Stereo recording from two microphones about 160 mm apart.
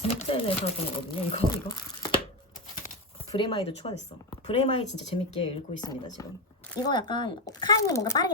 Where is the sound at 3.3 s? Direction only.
35° left (ahead or behind).